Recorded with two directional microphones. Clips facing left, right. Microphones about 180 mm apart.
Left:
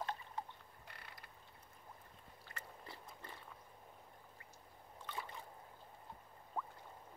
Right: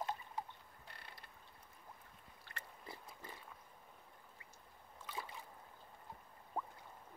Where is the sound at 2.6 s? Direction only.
15° right (ahead or behind).